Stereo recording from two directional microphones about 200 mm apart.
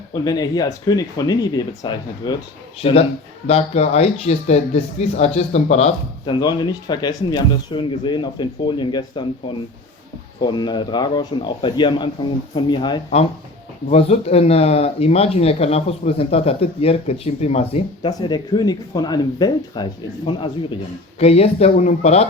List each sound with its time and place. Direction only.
0.1 s speech: 20° left (ahead or behind)
6.4 s speech: 20° left (ahead or behind)
10.4 s speech: 20° left (ahead or behind)